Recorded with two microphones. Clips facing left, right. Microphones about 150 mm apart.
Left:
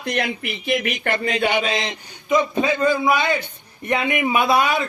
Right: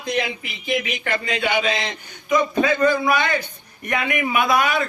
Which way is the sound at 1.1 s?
35° left (ahead or behind).